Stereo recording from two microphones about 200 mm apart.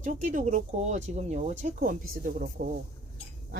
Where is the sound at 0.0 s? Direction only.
40° right (ahead or behind).